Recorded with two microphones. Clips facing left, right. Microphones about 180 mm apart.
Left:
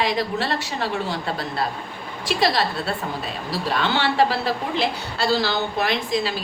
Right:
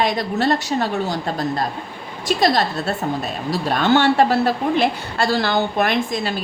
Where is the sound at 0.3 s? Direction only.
45° right (ahead or behind).